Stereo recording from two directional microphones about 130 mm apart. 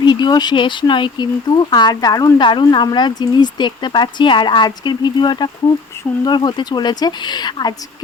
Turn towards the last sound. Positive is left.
turn(degrees=35)  # may be behind; listen again after turning